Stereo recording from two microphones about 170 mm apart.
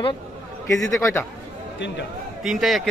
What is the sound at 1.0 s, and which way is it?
Speech, 15° left (ahead or behind).